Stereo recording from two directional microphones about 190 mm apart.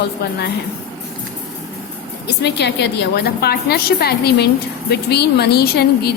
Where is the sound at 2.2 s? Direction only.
60° left (ahead or behind).